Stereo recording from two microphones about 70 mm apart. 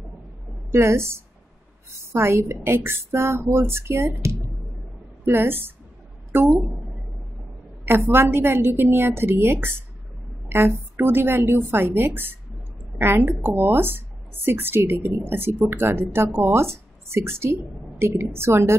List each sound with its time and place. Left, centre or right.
0.7 s a woman's voice: right
5.2 s a woman's voice: right
7.8 s a woman's voice: right